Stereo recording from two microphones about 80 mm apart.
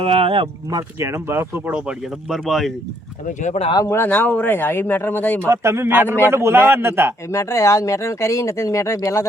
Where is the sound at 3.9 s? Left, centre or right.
Left.